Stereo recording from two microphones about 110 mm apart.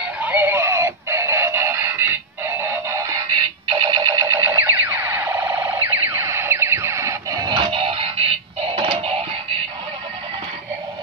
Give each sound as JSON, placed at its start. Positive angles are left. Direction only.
{"t": 0.2, "sound": "synthetic singing", "side_deg": -20}
{"t": 2.9, "sound": "music", "side_deg": -30}
{"t": 3.6, "sound": "a sound", "side_deg": -45}
{"t": 7.7, "sound": "music", "side_deg": -60}
{"t": 8.7, "sound": "synthetic singing", "side_deg": -50}